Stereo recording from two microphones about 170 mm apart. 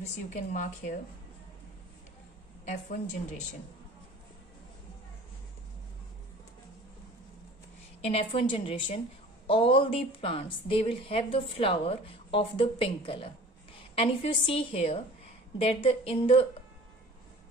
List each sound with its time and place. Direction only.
0.3 s a woman's voice: 45° left (ahead or behind)
2.6 s a woman's voice: 45° left (ahead or behind)
8.0 s a woman's voice: 35° left (ahead or behind)